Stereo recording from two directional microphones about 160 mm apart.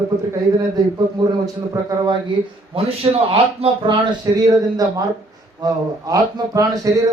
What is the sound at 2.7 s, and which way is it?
A man's voice, 35° right (ahead or behind).